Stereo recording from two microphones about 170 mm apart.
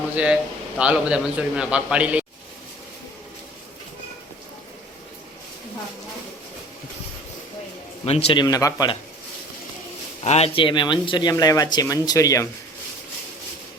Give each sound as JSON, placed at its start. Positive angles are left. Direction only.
{"t": 0.8, "sound": "a man's voice", "side_deg": -5}
{"t": 8.0, "sound": "speech", "side_deg": 35}
{"t": 10.2, "sound": "speech", "side_deg": 40}